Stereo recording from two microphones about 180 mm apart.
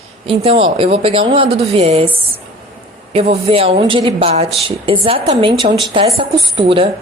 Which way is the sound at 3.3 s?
35° right (ahead or behind).